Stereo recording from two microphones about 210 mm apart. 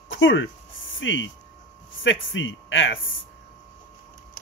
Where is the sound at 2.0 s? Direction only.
65° left (ahead or behind).